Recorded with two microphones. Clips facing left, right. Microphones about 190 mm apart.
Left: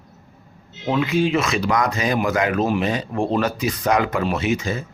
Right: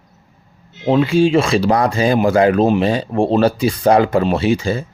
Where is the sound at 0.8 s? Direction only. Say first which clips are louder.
Right 6 dB; 30° right (ahead or behind).